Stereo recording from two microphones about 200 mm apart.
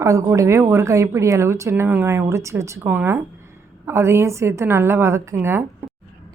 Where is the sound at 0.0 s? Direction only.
15° right (ahead or behind).